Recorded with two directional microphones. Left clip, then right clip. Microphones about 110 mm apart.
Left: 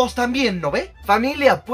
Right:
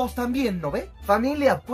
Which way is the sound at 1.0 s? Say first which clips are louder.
Left 4 dB; 10° left (ahead or behind).